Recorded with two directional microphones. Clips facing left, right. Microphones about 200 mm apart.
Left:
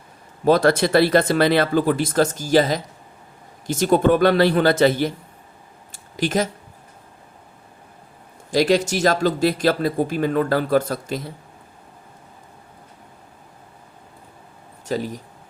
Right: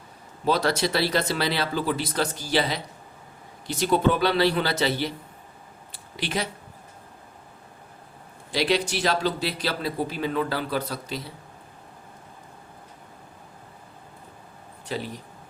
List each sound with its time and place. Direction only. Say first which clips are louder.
0.4 s speech: left 7 dB; 50° left (ahead or behind)
5.9 s a sound: left 8 dB; 45° left (ahead or behind)
8.4 s speech: left 6 dB; 45° left (ahead or behind)
14.8 s speech: left 7 dB; 45° left (ahead or behind)